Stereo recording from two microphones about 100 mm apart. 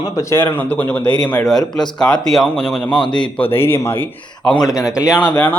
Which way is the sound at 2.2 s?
5° left (ahead or behind).